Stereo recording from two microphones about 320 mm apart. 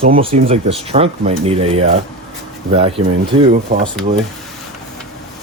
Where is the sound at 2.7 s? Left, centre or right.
Centre.